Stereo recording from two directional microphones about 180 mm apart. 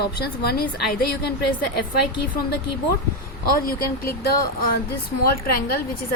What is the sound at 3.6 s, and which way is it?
A woman's voice, 55° left (ahead or behind).